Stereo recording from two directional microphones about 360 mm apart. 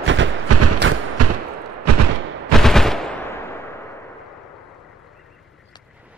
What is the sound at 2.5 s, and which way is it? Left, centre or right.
Machine gun, centre.